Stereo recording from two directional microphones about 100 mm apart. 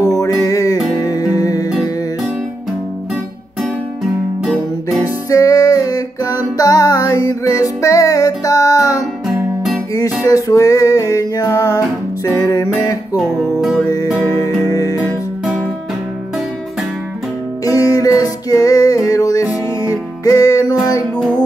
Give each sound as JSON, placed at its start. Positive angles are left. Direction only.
{"t": 0.0, "sound": "music", "side_deg": 40}
{"t": 4.8, "sound": "music", "side_deg": 35}
{"t": 10.2, "sound": "music", "side_deg": 35}
{"t": 13.2, "sound": "music", "side_deg": 0}
{"t": 14.4, "sound": "music", "side_deg": 40}
{"t": 17.6, "sound": "music", "side_deg": 40}